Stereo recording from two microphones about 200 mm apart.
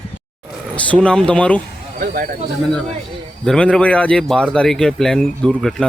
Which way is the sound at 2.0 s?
45° right (ahead or behind).